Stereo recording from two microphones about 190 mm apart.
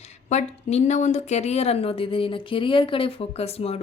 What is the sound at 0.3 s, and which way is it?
Speech, 35° left (ahead or behind).